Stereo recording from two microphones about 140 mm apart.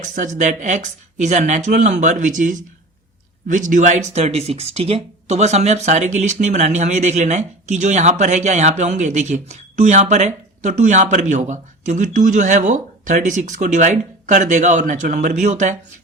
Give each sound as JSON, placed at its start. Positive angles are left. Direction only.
{"t": 0.0, "sound": "speech", "side_deg": -60}